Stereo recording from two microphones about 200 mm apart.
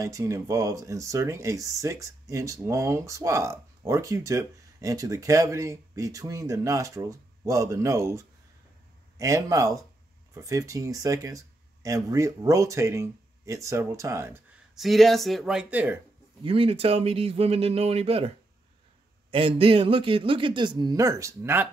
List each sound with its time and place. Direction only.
0.0 s speech: 15° right (ahead or behind)
14.8 s speech: centre (ahead or behind)
16.4 s speech: 30° right (ahead or behind)
19.3 s speech: 25° right (ahead or behind)